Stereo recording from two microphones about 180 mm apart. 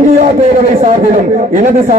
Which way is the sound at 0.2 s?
45° right (ahead or behind).